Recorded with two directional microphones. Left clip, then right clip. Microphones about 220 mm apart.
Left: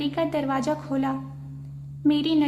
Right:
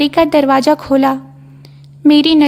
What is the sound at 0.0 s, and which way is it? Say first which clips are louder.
A woman's voice: right 15 dB; 45° right (ahead or behind).